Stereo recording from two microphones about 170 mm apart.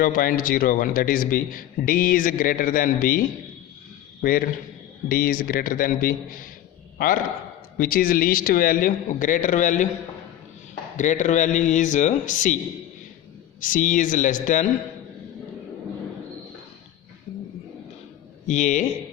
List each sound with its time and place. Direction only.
0.0 s a man's voice: 55° left (ahead or behind)
7.8 s a man's voice: 55° left (ahead or behind)
10.9 s speech: 45° left (ahead or behind)
13.6 s speech: 50° left (ahead or behind)
18.4 s speech: 45° left (ahead or behind)